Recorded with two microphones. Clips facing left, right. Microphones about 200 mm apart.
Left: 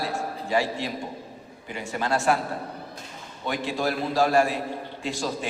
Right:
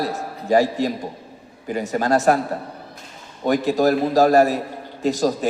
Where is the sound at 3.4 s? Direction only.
40° right (ahead or behind).